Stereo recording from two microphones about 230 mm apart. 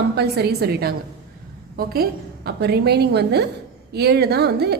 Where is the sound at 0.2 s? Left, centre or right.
Right.